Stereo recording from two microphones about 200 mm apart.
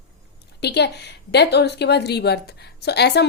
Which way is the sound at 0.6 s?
55° left (ahead or behind).